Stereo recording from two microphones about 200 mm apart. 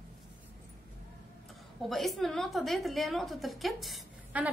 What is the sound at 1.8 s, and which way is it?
A woman's voice, centre (ahead or behind).